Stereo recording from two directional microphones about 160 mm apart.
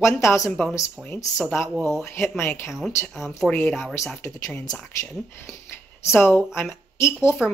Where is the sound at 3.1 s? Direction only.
Centre (ahead or behind).